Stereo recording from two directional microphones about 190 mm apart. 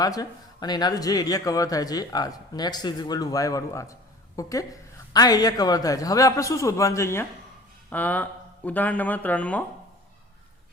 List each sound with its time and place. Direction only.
0.0 s a woman's voice: 20° left (ahead or behind)